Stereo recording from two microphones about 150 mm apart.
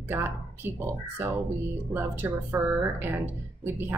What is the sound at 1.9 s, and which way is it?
A woman's voice, 15° right (ahead or behind).